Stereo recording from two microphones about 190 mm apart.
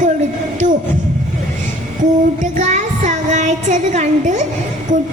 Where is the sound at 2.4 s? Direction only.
40° right (ahead or behind).